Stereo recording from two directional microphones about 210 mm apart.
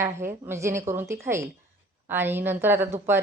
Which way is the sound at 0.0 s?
10° right (ahead or behind).